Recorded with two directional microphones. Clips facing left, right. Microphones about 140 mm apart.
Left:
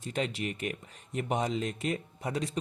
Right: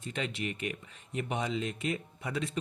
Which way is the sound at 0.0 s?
40° left (ahead or behind).